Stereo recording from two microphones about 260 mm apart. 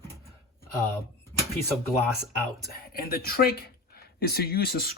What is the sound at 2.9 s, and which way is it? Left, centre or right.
Speech, left.